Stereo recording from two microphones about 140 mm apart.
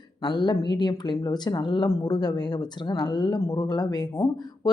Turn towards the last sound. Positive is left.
turn(degrees=30)  # may be behind; listen again after turning